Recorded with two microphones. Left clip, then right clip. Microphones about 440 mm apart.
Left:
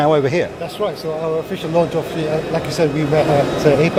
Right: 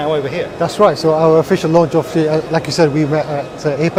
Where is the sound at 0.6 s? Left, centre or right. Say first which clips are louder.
Right 10 dB; right.